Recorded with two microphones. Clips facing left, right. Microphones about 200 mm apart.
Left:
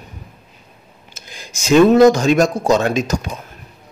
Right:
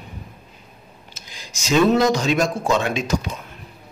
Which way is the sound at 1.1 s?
50° left (ahead or behind).